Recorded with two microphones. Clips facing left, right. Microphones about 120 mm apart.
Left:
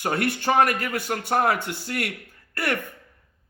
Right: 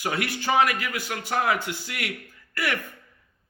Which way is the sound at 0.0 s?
55° left (ahead or behind).